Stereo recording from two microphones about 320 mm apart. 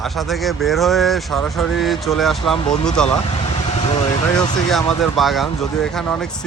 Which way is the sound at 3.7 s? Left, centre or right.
Centre.